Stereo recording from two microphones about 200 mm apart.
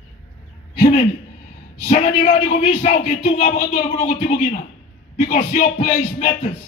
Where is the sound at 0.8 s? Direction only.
45° left (ahead or behind).